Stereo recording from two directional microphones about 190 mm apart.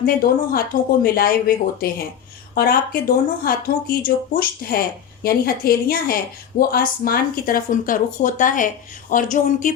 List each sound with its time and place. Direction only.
0.0 s speech: 50° left (ahead or behind)